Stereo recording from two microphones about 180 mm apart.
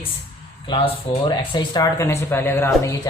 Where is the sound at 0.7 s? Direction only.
25° left (ahead or behind).